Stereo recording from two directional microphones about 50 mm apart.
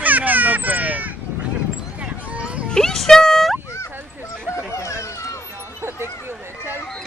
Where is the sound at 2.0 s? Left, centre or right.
Right.